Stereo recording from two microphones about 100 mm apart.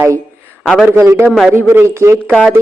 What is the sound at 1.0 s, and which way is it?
Speech, 25° right (ahead or behind).